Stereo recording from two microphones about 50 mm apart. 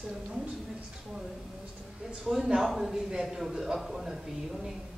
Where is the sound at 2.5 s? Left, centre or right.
Centre.